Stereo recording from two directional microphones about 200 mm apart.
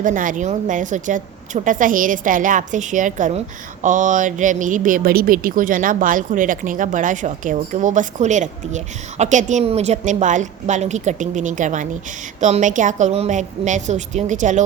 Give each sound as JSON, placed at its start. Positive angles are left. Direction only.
{"t": 0.0, "sound": "a woman's voice", "side_deg": -40}